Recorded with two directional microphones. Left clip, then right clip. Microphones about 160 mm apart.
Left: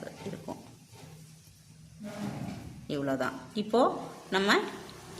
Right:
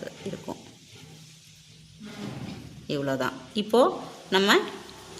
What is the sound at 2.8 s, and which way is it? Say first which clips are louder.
A woman's voice: right 4 dB; 35° right (ahead or behind).